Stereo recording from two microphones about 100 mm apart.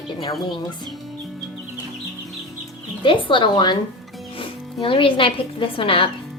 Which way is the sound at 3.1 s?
60° left (ahead or behind).